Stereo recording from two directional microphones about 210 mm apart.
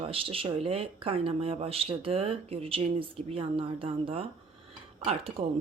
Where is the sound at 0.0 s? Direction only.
25° right (ahead or behind).